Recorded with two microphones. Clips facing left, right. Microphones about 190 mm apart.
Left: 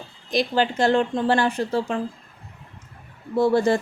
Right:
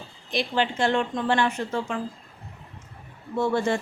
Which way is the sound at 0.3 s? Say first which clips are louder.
Left 4 dB; 40° left (ahead or behind).